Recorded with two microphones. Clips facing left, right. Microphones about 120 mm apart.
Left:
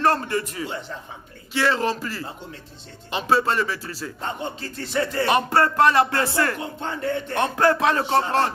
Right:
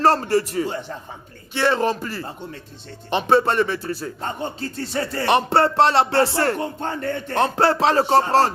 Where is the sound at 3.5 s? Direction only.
50° right (ahead or behind).